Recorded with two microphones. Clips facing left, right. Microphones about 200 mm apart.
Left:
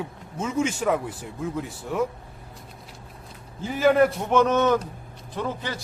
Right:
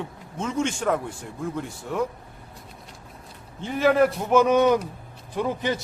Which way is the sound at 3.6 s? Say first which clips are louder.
Left 1 dB; centre (ahead or behind).